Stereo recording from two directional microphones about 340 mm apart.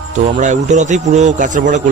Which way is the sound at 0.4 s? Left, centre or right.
Right.